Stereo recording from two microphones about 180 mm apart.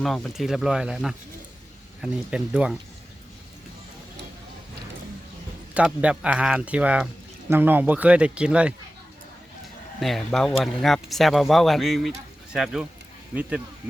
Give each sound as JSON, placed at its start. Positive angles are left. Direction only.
{"t": 0.0, "sound": "speech", "side_deg": 0}
{"t": 5.7, "sound": "speech", "side_deg": -5}
{"t": 10.0, "sound": "speech", "side_deg": 0}